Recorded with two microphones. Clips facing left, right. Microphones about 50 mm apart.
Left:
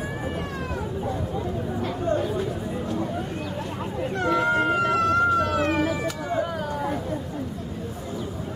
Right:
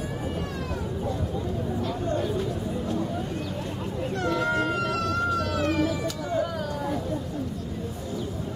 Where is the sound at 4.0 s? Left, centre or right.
Centre.